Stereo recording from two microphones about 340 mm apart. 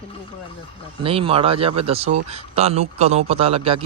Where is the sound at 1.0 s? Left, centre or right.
Centre.